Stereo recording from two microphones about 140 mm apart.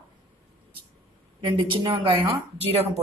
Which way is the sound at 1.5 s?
35° right (ahead or behind).